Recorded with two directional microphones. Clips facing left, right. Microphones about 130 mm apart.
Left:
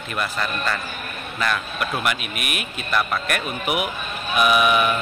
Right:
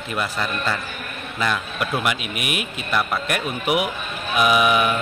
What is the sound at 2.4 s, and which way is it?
Speech, 90° right.